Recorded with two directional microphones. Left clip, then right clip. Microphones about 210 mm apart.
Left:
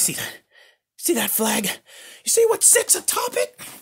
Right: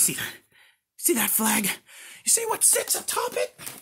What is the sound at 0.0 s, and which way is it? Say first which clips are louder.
Speech: left 2 dB; 40° left (ahead or behind).